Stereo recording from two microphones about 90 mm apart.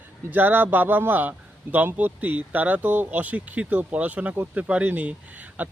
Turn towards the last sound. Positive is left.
turn(degrees=-20)  # may be behind; listen again after turning